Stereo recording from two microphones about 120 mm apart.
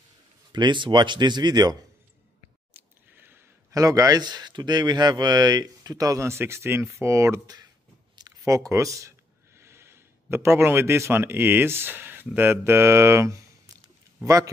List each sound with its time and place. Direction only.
0.5 s speech: 40° right (ahead or behind)
2.7 s a sound: 15° right (ahead or behind)
3.7 s a man's voice: 30° right (ahead or behind)